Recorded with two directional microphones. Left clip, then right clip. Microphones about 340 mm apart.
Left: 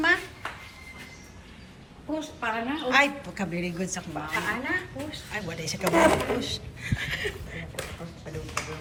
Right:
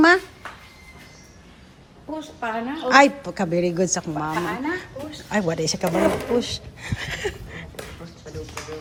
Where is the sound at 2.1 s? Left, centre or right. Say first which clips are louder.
Right 2 dB; right.